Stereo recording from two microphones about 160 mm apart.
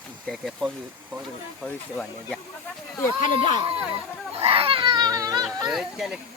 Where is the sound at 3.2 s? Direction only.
50° left (ahead or behind).